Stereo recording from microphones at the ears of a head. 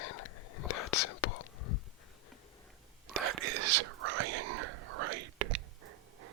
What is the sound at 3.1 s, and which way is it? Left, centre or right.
Whispering, right.